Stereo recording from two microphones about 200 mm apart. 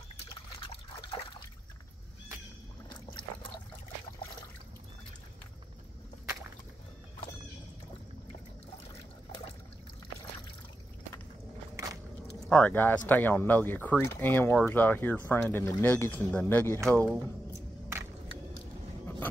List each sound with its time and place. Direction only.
11.7 s biting: 15° right (ahead or behind)
12.4 s speech: 5° left (ahead or behind)